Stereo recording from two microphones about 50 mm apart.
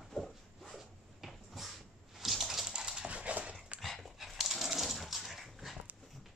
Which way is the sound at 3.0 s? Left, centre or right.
Right.